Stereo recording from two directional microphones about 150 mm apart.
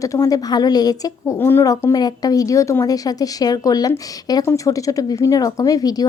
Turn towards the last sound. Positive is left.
turn(degrees=25)  # may be behind; listen again after turning